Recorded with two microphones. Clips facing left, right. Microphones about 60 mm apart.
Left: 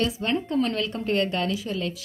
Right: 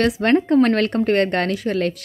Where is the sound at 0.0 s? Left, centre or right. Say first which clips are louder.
Right 9 dB; right.